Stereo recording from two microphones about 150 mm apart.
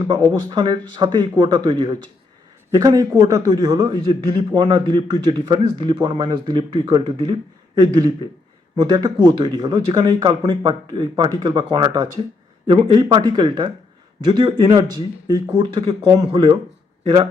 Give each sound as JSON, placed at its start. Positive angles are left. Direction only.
{"t": 0.1, "sound": "a man's voice", "side_deg": -30}
{"t": 15.7, "sound": "speech", "side_deg": -40}